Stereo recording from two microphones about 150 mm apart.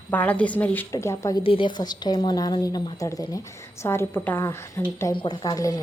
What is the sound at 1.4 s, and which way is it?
A woman's voice, 35° left (ahead or behind).